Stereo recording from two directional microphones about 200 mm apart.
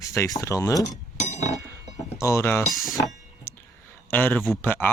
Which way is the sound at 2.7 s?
Centre (ahead or behind).